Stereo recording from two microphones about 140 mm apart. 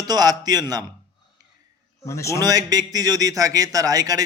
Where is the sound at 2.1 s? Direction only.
20° left (ahead or behind).